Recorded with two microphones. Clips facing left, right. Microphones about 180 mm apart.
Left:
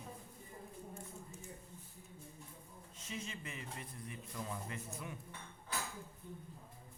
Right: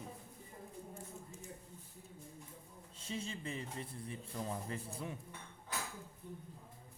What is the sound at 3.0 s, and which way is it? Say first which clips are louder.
Speech: right 3 dB; 30° right (ahead or behind).